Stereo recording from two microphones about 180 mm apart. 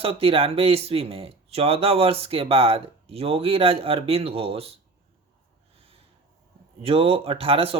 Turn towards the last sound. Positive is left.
turn(degrees=-30)  # may be behind; listen again after turning